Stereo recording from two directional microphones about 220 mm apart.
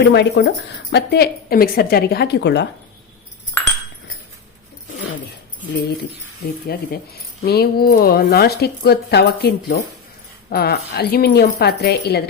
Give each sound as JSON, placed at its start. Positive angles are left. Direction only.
{"t": 0.1, "sound": "a woman's voice", "side_deg": 50}
{"t": 3.6, "sound": "chink", "side_deg": 10}
{"t": 6.7, "sound": "a woman's voice", "side_deg": 45}